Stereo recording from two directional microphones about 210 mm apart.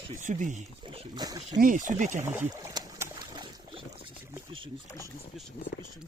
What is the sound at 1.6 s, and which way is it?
Speech, 40° right (ahead or behind).